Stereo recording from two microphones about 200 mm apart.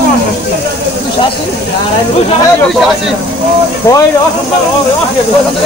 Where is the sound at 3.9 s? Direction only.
15° left (ahead or behind).